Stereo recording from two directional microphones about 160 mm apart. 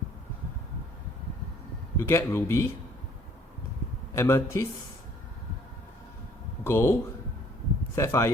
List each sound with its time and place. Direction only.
2.0 s speech: 15° left (ahead or behind)
4.1 s speech: 15° left (ahead or behind)
6.7 s speech: 15° left (ahead or behind)